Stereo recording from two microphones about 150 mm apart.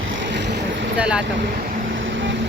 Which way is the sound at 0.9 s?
5° right (ahead or behind).